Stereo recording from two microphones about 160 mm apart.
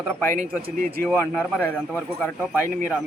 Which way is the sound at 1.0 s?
Centre (ahead or behind).